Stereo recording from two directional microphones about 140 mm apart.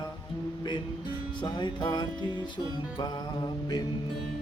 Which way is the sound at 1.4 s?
35° left (ahead or behind).